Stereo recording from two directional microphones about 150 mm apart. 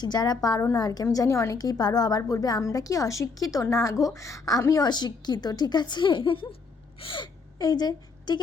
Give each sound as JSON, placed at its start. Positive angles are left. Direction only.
{"t": 0.0, "sound": "a woman's voice", "side_deg": 25}